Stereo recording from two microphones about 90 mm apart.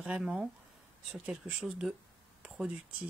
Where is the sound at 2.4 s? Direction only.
5° right (ahead or behind).